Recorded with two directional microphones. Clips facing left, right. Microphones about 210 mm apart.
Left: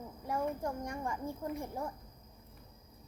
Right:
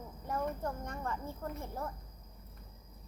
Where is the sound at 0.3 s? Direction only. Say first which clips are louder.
Left 1 dB; 10° left (ahead or behind).